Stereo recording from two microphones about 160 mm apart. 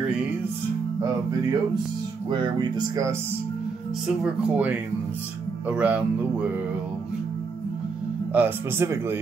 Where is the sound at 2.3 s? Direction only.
30° right (ahead or behind).